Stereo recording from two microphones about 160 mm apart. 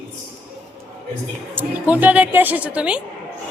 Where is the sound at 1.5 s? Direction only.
10° right (ahead or behind).